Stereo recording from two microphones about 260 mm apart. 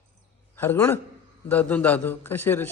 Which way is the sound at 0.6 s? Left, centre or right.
Centre.